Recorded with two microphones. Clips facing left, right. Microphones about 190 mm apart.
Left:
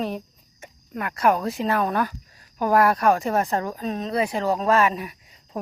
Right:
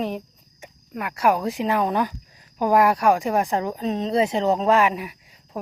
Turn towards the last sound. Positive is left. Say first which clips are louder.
# even
turn(degrees=-10)  # may be behind; listen again after turning